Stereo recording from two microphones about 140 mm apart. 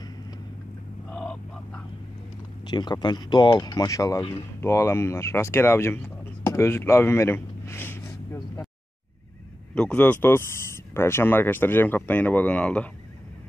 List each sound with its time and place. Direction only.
1.1 s goose: 5° left (ahead or behind)
2.6 s speech: 30° left (ahead or behind)
9.8 s speech: 10° left (ahead or behind)